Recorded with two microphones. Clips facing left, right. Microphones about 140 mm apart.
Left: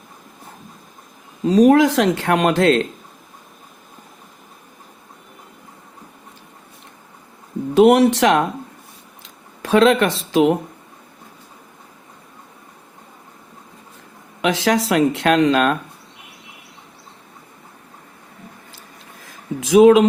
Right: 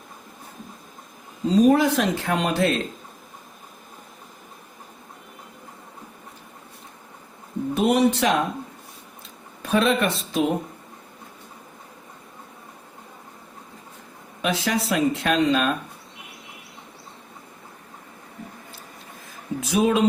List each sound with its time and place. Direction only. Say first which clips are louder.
1.5 s speech: left 5 dB; 90° left
7.7 s speech: left 8 dB; 90° left
9.6 s speech: left 7 dB; 90° left
14.4 s speech: left 6 dB; 90° left; by 15.8 s 75° left (ahead or behind)
19.2 s a sound: left 3 dB; 90° left